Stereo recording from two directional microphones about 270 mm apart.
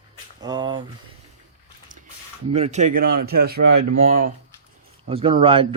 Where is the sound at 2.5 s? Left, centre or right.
Right.